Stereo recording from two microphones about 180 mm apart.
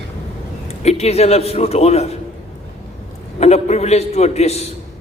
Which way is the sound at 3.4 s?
35° left (ahead or behind).